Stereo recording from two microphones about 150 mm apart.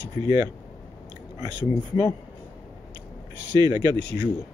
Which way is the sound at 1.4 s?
30° right (ahead or behind).